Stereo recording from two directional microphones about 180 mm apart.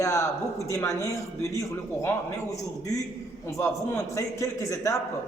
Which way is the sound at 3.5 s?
15° left (ahead or behind).